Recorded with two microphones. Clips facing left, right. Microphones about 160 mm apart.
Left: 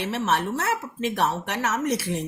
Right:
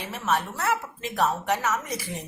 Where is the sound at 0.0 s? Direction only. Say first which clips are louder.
Left 3 dB; 70° left (ahead or behind).